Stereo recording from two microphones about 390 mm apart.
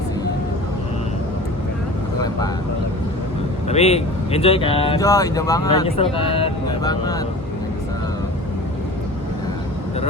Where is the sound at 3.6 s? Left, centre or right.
Centre.